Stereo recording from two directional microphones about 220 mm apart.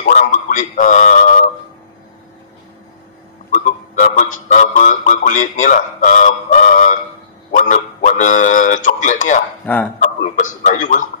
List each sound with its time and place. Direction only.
0.0 s speech: 35° left (ahead or behind)
3.5 s a man's voice: 35° left (ahead or behind)